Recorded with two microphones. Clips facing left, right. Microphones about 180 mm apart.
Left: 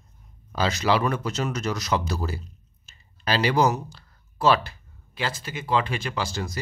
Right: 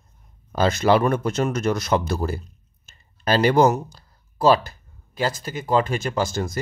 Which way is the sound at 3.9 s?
40° right (ahead or behind).